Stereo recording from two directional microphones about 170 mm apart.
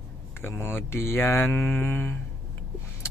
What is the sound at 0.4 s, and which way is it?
Speech, 15° left (ahead or behind).